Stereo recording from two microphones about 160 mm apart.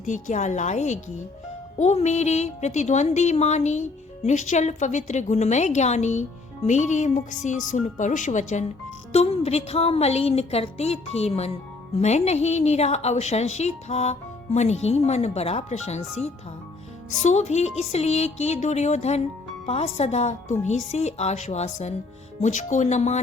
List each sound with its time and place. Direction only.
0.0 s a woman's voice: 50° left (ahead or behind)